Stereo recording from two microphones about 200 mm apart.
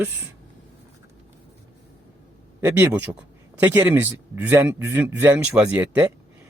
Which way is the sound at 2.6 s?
10° right (ahead or behind).